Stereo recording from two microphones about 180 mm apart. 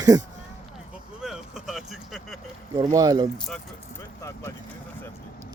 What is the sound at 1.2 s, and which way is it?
Vehicle, 5° right (ahead or behind).